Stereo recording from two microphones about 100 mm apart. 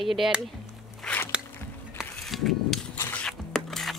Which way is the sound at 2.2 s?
Centre (ahead or behind).